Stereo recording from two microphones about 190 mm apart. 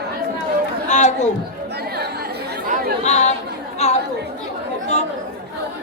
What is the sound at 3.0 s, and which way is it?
Chatter, 35° left (ahead or behind).